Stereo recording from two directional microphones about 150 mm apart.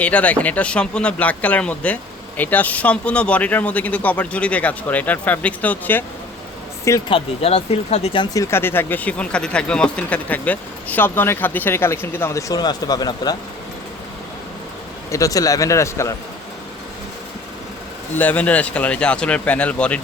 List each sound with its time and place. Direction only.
0.0 s speech: 10° left (ahead or behind)
7.1 s speech: 45° left (ahead or behind)
8.3 s speech: 20° left (ahead or behind)
15.1 s a man's voice: 25° left (ahead or behind)
18.2 s speech: 10° left (ahead or behind)